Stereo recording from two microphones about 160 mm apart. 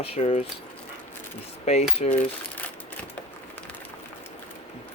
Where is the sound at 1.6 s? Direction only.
40° left (ahead or behind).